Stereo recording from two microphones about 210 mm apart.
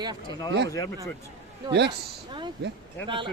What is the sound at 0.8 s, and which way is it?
Speech, 15° left (ahead or behind).